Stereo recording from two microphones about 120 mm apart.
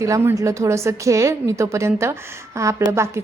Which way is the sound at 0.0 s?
25° right (ahead or behind).